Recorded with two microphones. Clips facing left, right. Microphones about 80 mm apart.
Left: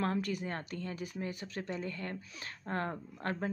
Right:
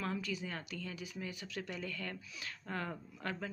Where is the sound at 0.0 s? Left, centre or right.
Left.